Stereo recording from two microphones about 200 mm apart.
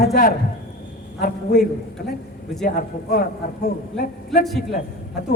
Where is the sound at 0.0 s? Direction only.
50° left (ahead or behind).